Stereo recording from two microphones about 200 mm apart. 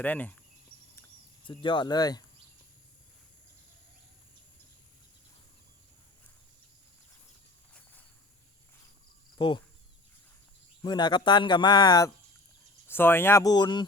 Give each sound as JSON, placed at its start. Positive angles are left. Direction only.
{"t": 0.0, "sound": "speech", "side_deg": 10}
{"t": 1.5, "sound": "a man's voice", "side_deg": 25}
{"t": 10.8, "sound": "a man's voice", "side_deg": 20}